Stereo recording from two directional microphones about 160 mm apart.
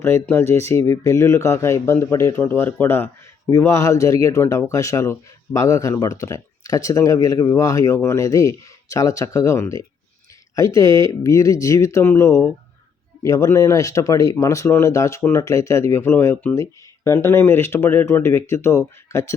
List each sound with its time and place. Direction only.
0.0 s speech: 15° left (ahead or behind)